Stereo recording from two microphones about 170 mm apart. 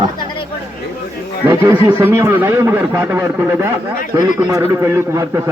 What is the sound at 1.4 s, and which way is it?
A man's voice, 15° right (ahead or behind).